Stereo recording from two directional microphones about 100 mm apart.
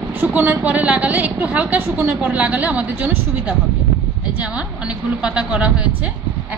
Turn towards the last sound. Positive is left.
turn(degrees=-10)  # may be behind; listen again after turning